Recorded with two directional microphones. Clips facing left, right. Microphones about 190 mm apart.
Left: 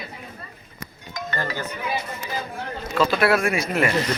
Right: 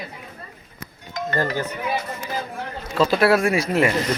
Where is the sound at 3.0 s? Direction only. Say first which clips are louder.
Right 2 dB; 35° right (ahead or behind).